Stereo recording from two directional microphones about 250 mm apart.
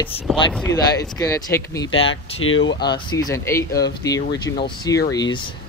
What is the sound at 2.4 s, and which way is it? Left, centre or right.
Speech, left.